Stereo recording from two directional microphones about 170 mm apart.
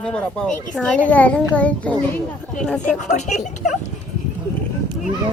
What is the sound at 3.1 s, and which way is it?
Speech, 45° left (ahead or behind).